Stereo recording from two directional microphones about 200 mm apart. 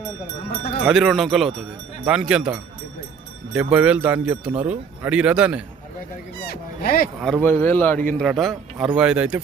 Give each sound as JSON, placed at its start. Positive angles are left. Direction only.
{"t": 0.9, "sound": "speech", "side_deg": 0}
{"t": 6.4, "sound": "speech", "side_deg": 50}
{"t": 7.2, "sound": "speech", "side_deg": 0}
{"t": 7.4, "sound": "a man's voice", "side_deg": 10}